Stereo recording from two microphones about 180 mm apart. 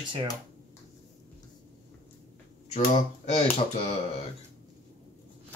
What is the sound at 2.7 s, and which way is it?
Speech, 40° left (ahead or behind).